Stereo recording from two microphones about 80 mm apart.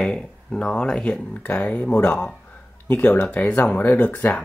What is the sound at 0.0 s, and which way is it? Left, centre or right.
Speech, centre.